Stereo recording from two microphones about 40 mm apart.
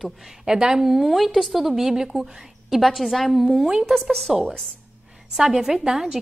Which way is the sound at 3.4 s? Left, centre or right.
Centre.